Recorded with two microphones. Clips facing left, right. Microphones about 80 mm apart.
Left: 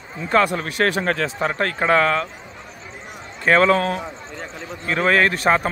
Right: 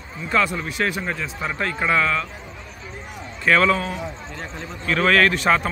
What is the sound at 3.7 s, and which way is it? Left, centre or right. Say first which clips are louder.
Speech: left 4 dB; left.